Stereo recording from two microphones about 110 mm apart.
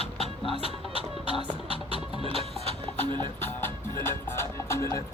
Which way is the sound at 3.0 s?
45° right (ahead or behind).